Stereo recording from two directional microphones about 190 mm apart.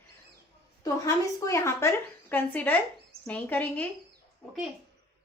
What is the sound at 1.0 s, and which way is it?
A woman's voice, 15° left (ahead or behind).